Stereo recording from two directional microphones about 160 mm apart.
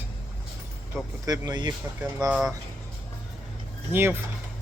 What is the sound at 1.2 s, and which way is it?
Speech, 25° right (ahead or behind).